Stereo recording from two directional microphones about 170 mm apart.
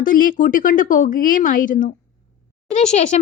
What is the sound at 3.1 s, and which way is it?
Speech, 40° left (ahead or behind).